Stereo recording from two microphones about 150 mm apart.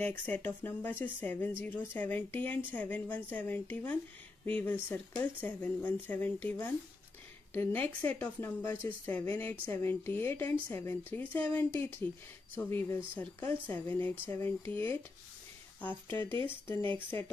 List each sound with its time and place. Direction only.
0.0 s a woman's voice: 10° left (ahead or behind)